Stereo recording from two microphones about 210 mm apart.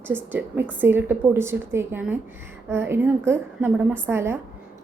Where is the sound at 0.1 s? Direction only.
10° right (ahead or behind).